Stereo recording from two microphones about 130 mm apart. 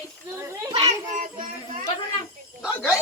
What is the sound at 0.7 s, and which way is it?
Speech, 55° right (ahead or behind).